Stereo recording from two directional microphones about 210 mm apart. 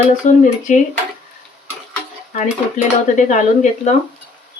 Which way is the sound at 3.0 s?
35° left (ahead or behind).